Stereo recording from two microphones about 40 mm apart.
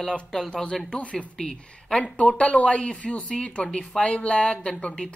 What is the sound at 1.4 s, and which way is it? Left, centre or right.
Speech, centre.